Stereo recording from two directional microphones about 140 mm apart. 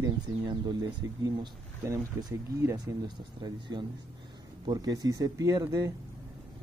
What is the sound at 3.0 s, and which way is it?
Speech, 30° right (ahead or behind).